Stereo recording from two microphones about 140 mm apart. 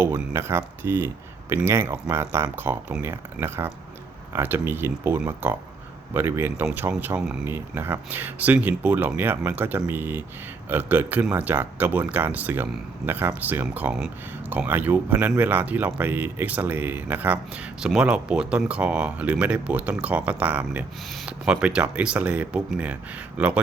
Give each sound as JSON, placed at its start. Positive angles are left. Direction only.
{"t": 0.0, "sound": "speech", "side_deg": -20}